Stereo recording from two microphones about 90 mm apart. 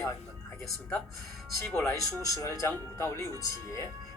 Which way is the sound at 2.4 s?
35° left (ahead or behind).